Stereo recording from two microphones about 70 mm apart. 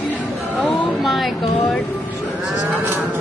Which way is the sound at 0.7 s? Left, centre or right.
Centre.